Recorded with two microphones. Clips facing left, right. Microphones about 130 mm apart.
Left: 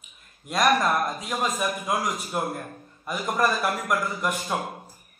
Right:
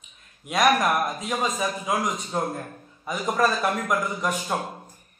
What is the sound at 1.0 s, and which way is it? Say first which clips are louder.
A man's voice: right 1 dB; centre (ahead or behind).